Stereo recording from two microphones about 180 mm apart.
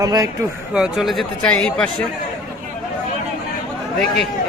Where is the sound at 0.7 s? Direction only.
5° right (ahead or behind).